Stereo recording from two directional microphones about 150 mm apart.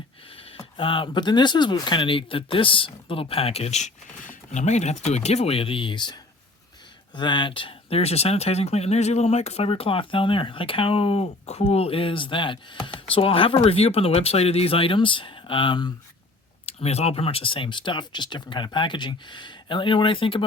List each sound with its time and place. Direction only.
0.5 s speech: 35° left (ahead or behind)
7.2 s speech: 30° left (ahead or behind)
16.6 s speech: 45° left (ahead or behind)